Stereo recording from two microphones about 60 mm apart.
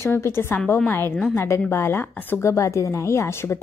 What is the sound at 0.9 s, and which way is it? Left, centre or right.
Speech, left.